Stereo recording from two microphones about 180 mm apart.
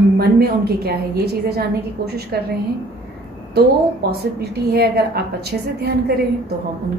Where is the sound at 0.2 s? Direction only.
60° right (ahead or behind).